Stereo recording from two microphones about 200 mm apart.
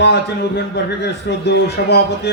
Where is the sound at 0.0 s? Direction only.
55° left (ahead or behind).